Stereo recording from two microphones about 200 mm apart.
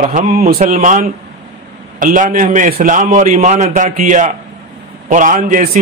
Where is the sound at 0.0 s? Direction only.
35° right (ahead or behind).